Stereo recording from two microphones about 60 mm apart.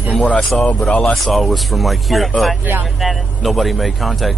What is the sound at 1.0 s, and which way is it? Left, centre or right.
Speech, centre.